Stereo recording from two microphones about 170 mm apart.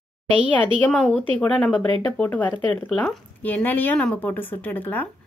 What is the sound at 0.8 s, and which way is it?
A woman's voice, 5° left (ahead or behind).